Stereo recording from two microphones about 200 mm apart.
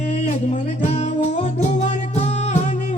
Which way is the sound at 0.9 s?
35° left (ahead or behind).